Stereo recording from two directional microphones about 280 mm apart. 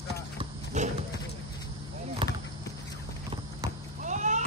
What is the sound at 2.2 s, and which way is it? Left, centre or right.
Basketball bounce, centre.